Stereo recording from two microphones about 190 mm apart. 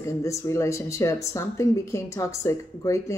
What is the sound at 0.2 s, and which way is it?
A woman's voice, 15° left (ahead or behind).